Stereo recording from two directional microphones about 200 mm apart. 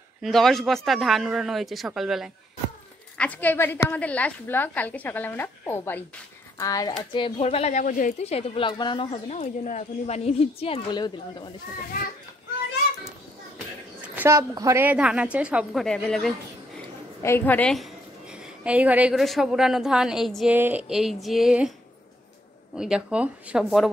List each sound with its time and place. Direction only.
0.2 s a woman's voice: centre (ahead or behind); by 11.5 s 20° left (ahead or behind)
14.0 s a woman's voice: 10° right (ahead or behind)
17.2 s a woman's voice: 10° left (ahead or behind)
22.8 s a woman's voice: 5° right (ahead or behind)